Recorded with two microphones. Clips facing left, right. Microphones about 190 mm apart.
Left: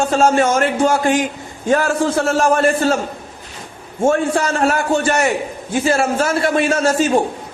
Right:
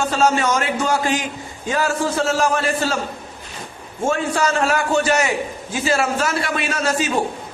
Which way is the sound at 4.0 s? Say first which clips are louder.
Left 4 dB; 50° left (ahead or behind).